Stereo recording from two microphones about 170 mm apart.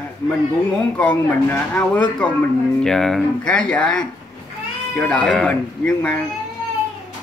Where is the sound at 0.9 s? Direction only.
10° left (ahead or behind).